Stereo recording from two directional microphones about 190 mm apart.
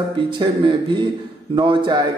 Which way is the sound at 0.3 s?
25° right (ahead or behind).